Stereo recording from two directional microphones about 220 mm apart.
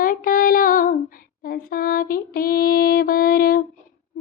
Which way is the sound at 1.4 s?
40° left (ahead or behind).